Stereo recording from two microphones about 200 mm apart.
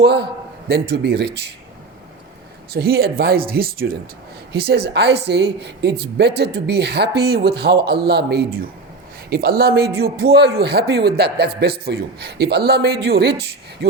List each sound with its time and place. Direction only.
0.0 s a woman's voice: 55° right (ahead or behind)
2.7 s a man's voice: 50° right (ahead or behind)